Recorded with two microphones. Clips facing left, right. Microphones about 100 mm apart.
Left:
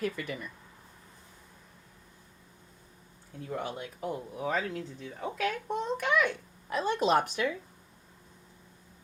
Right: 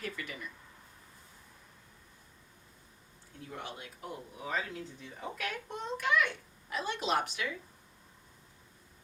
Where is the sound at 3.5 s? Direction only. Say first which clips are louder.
Left 8 dB; 45° left (ahead or behind).